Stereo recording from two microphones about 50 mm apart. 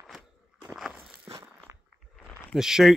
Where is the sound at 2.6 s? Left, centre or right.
Centre.